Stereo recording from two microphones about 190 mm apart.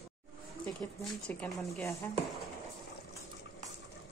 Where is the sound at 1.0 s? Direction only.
5° left (ahead or behind).